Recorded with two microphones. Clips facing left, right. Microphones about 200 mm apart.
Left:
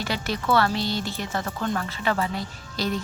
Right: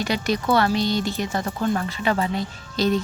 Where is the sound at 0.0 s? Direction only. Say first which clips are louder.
Right 5 dB; 15° right (ahead or behind).